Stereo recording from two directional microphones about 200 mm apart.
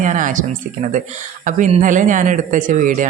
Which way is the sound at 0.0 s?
40° right (ahead or behind).